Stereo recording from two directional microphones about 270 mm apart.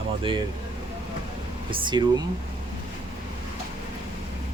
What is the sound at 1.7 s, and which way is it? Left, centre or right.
Speech, centre.